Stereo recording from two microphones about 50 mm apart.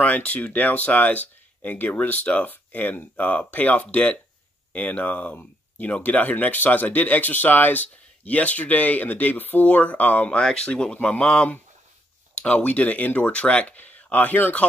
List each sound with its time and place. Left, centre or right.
0.0 s speech: left
10.4 s speech: centre; by 14.6 s left